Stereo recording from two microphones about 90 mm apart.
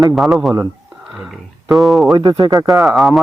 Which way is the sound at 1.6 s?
Centre (ahead or behind).